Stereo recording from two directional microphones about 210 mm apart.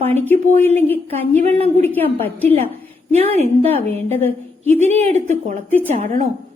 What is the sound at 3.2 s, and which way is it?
A woman's voice, 30° right (ahead or behind).